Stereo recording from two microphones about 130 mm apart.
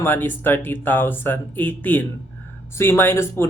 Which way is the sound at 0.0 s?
15° left (ahead or behind).